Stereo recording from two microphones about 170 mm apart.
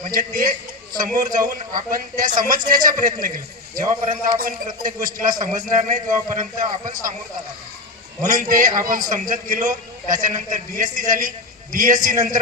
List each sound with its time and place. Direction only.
0.0 s a man's voice: 55° right (ahead or behind)
8.2 s a man's voice: 50° right (ahead or behind)